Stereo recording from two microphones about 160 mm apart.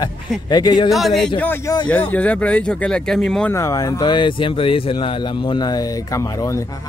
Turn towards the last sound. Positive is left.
turn(degrees=20)  # may be behind; listen again after turning